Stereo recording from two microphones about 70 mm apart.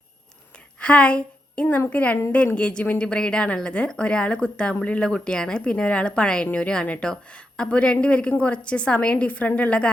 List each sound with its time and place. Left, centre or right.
0.8 s a woman's voice: centre